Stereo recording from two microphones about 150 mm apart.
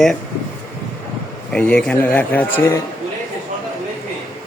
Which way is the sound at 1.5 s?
10° left (ahead or behind).